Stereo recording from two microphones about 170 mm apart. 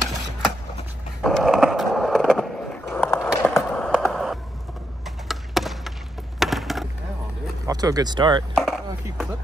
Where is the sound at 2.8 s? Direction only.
10° left (ahead or behind).